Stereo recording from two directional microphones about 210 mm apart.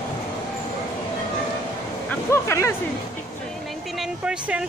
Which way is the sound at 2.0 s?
10° left (ahead or behind).